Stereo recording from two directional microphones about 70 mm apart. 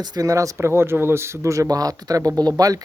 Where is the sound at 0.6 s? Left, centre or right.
Right.